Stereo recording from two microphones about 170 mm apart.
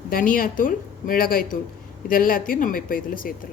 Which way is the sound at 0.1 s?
55° left (ahead or behind).